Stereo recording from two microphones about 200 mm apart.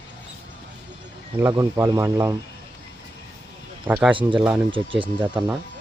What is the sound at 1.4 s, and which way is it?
Speech, 15° right (ahead or behind).